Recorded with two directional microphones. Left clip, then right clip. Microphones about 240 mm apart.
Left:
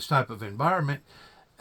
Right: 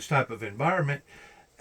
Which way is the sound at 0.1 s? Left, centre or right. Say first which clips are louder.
Even; left.